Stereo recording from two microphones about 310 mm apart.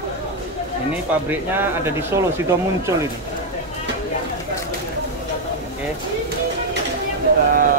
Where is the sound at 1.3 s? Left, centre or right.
Centre.